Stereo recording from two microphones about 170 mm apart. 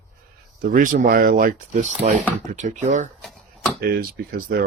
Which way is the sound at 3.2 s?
Centre (ahead or behind).